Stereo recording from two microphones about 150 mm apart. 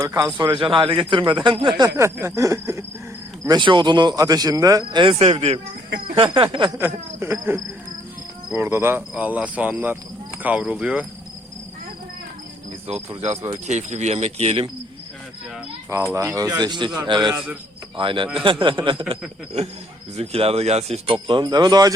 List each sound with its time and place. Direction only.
0.0 s speech: 20° right (ahead or behind)
0.3 s speech: 30° right (ahead or behind)
2.0 s speech: 20° right (ahead or behind)
5.2 s cricket: 45° right (ahead or behind)
6.1 s speech: 35° right (ahead or behind)
6.7 s speech: 15° right (ahead or behind)
12.9 s cricket: 45° right (ahead or behind)
16.1 s speech: 20° right (ahead or behind)
20.1 s speech: 40° right (ahead or behind); by 21.9 s 25° right (ahead or behind)